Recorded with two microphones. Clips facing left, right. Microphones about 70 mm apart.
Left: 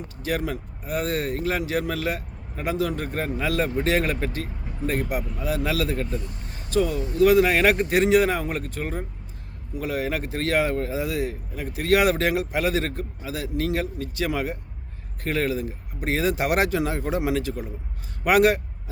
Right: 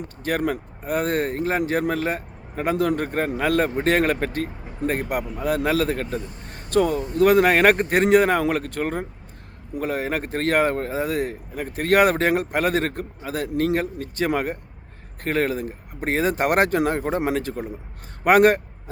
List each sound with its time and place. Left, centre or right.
0.2 s speech: right
9.7 s a man's voice: right